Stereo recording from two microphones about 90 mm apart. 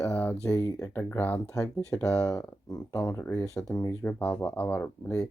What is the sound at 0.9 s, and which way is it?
Speech, 20° left (ahead or behind).